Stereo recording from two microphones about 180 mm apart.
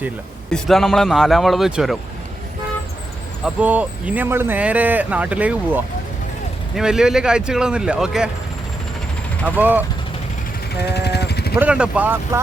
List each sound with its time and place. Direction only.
0.5 s speech: centre (ahead or behind)
3.4 s speech: 10° right (ahead or behind)
9.6 s speech: 10° right (ahead or behind)
10.8 s a sound: 65° left (ahead or behind)
11.5 s speech: 10° right (ahead or behind)